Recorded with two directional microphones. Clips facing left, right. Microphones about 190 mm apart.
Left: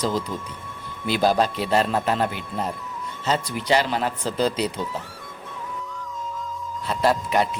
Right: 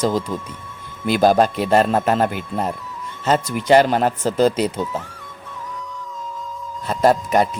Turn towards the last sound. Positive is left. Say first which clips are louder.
# right 5 dB
turn(degrees=-45)  # may be behind; listen again after turning